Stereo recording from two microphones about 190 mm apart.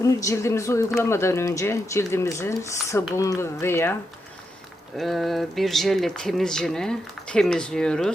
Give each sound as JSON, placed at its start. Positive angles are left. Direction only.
{"t": 0.0, "sound": "speech", "side_deg": 15}
{"t": 4.9, "sound": "speech", "side_deg": 0}